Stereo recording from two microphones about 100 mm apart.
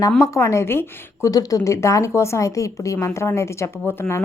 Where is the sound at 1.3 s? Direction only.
35° left (ahead or behind).